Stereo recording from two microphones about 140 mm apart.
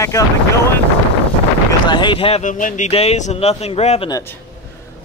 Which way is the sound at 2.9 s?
50° left (ahead or behind).